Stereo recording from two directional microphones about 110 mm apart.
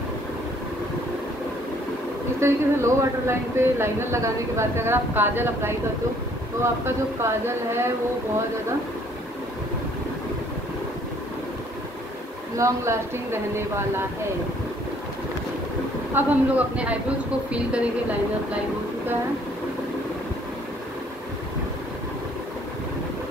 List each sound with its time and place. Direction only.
2.4 s speech: 25° right (ahead or behind)
12.5 s speech: 25° right (ahead or behind)
16.2 s speech: 15° right (ahead or behind)